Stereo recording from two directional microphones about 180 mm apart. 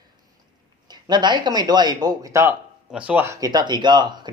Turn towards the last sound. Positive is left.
turn(degrees=-25)  # may be behind; listen again after turning